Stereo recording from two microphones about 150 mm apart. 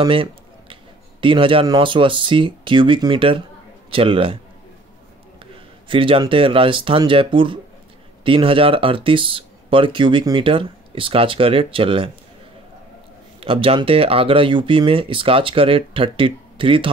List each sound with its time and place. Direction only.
0.0 s a sound: 35° right (ahead or behind)
1.2 s speech: 35° right (ahead or behind)
5.9 s speech: 35° right (ahead or behind)
13.4 s speech: 40° right (ahead or behind)